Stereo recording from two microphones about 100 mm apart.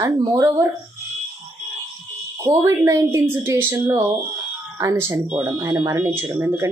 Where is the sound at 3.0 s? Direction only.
25° right (ahead or behind).